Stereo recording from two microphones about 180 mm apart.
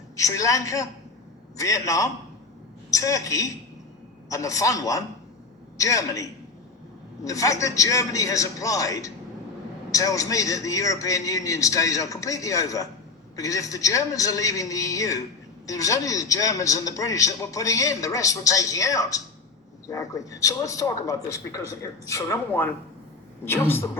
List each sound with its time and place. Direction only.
0.2 s a man's voice: 15° left (ahead or behind)
7.3 s a man's voice: 20° left (ahead or behind)